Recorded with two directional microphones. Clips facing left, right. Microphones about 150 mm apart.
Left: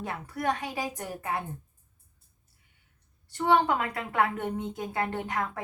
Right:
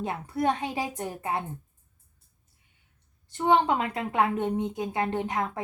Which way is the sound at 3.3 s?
20° right (ahead or behind).